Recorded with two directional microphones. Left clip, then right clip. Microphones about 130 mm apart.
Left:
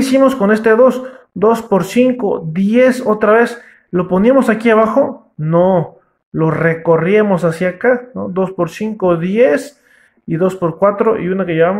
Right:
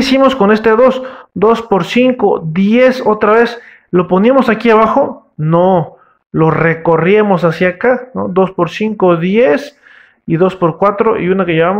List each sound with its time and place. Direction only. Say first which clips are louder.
0.0 s a man's voice: right 2 dB; 25° right (ahead or behind)